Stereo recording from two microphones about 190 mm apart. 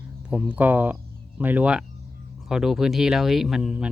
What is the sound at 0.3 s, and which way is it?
Speech, 5° right (ahead or behind).